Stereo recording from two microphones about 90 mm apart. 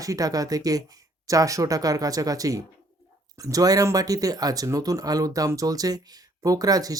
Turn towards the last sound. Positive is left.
turn(degrees=-45)  # may be behind; listen again after turning